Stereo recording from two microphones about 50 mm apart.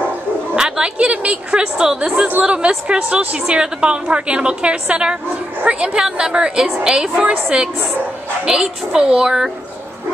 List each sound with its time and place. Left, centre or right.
0.6 s a woman's voice: centre